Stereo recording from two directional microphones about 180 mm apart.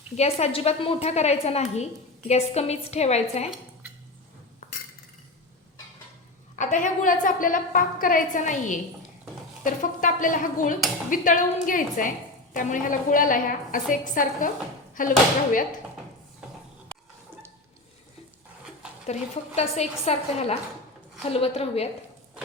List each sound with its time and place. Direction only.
0.2 s a woman's voice: 35° left (ahead or behind)
6.6 s speech: 45° left (ahead or behind)
19.0 s a woman's voice: 40° left (ahead or behind)